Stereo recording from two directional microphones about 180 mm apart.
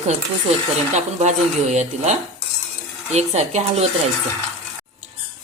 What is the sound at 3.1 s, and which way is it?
Speech, 40° right (ahead or behind).